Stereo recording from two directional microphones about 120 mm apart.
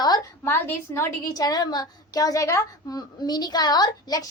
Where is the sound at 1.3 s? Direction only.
35° left (ahead or behind).